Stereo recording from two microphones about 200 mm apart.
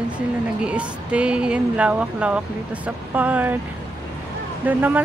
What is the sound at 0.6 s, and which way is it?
Speech, 5° right (ahead or behind).